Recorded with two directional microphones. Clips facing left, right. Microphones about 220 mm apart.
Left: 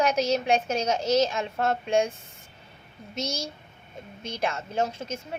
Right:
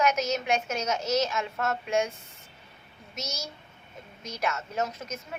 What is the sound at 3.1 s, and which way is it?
A woman's voice, 30° left (ahead or behind).